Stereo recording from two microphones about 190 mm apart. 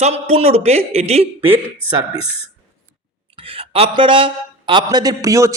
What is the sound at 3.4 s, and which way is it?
A woman's voice, 30° right (ahead or behind).